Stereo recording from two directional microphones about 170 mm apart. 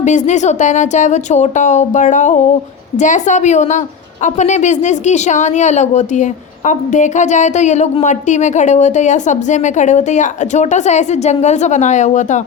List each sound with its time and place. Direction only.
0.0 s a woman's voice: 45° left (ahead or behind)